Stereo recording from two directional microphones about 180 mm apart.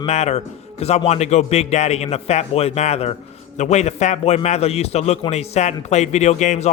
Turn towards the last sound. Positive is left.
turn(degrees=40)  # may be behind; listen again after turning